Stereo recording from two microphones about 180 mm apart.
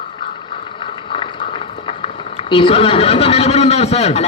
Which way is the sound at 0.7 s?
30° left (ahead or behind).